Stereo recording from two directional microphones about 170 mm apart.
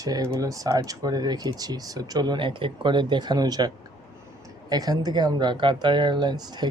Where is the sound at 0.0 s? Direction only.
20° right (ahead or behind).